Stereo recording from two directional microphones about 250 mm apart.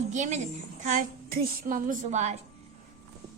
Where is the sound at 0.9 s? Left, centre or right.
Right.